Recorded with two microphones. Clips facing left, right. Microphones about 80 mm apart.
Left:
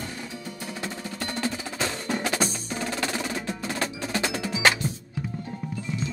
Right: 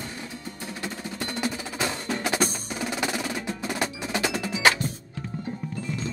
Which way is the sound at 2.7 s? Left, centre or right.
Centre.